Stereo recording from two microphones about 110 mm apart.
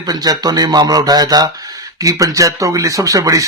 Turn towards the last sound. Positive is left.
turn(degrees=-30)  # may be behind; listen again after turning